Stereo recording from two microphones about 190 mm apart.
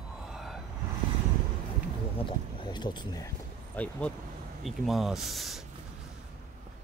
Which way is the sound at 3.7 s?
5° left (ahead or behind).